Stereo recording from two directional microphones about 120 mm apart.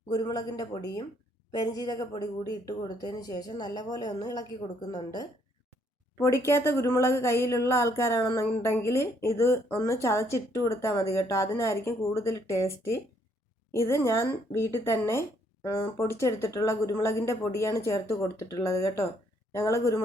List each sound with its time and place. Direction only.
0.1 s speech: 30° left (ahead or behind)
6.1 s speech: 20° left (ahead or behind)